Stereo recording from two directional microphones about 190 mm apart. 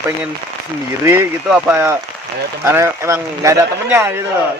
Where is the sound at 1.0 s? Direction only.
15° right (ahead or behind).